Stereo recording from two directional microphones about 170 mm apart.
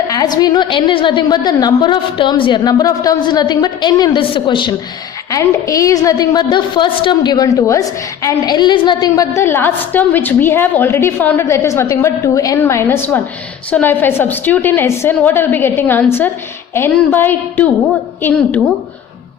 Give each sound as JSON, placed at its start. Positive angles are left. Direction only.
{"t": 0.1, "sound": "a woman's voice", "side_deg": 20}